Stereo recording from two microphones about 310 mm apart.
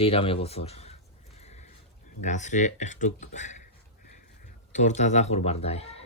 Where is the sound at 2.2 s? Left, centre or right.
Left.